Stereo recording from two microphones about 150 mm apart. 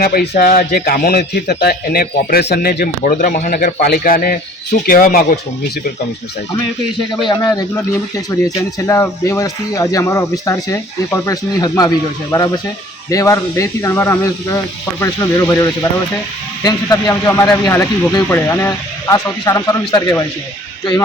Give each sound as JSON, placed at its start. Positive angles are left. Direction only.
{"t": 0.0, "sound": "speech", "side_deg": 85}
{"t": 7.3, "sound": "speech", "side_deg": 25}
{"t": 13.1, "sound": "speech", "side_deg": 20}